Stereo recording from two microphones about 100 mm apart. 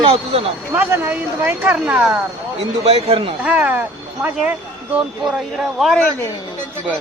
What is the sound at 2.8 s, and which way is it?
Speech, 80° right.